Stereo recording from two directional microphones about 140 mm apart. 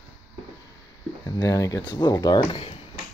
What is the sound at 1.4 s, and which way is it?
Speech, 25° left (ahead or behind).